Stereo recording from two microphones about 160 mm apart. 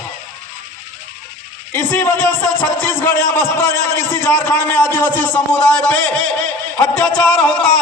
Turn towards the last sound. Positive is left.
turn(degrees=5)  # may be behind; listen again after turning